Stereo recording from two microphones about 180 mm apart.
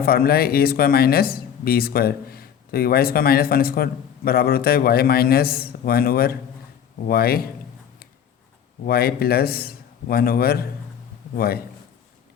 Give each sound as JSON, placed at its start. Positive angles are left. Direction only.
{"t": 0.0, "sound": "speech", "side_deg": 60}
{"t": 8.8, "sound": "speech", "side_deg": 60}